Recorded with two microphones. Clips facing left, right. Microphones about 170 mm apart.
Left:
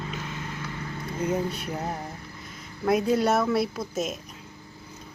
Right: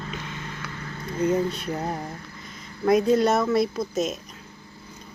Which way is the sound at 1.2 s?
10° left (ahead or behind).